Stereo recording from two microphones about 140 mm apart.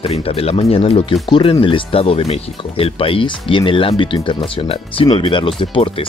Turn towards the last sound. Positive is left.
turn(degrees=40)  # may be behind; listen again after turning